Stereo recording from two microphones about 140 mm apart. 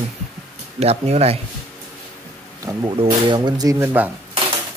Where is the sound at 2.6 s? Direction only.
25° right (ahead or behind).